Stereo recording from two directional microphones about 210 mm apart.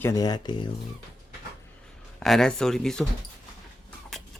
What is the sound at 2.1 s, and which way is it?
Speech, centre (ahead or behind).